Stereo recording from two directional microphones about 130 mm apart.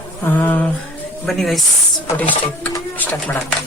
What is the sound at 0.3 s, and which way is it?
Speech, 15° left (ahead or behind).